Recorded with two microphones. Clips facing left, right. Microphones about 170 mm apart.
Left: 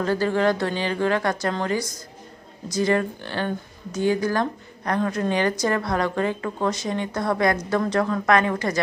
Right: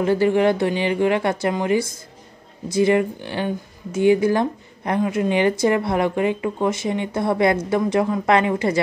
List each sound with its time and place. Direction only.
0.0 s a woman's voice: 20° right (ahead or behind)